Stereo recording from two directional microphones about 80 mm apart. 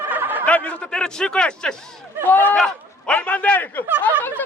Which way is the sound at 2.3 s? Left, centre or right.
Left.